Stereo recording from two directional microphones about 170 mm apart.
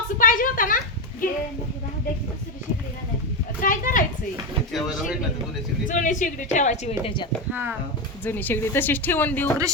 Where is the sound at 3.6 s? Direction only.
55° left (ahead or behind).